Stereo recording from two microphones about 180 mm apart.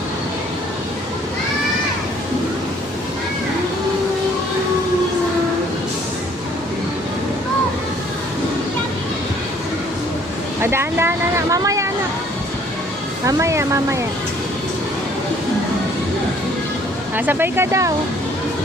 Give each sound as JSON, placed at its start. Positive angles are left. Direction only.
{"t": 10.6, "sound": "speech", "side_deg": -15}
{"t": 13.2, "sound": "speech", "side_deg": -15}
{"t": 17.2, "sound": "speech", "side_deg": -10}